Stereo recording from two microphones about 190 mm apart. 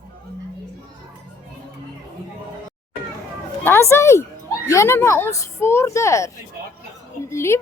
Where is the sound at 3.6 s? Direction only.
15° left (ahead or behind).